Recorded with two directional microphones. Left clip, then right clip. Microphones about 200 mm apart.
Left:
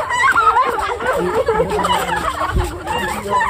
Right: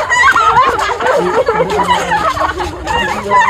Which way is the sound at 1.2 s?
30° left (ahead or behind).